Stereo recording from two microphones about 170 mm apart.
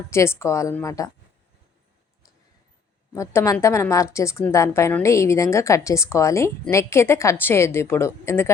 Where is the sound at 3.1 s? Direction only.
15° left (ahead or behind).